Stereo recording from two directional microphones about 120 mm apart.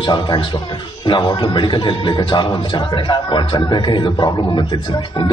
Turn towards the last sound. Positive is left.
turn(degrees=40)  # may be behind; listen again after turning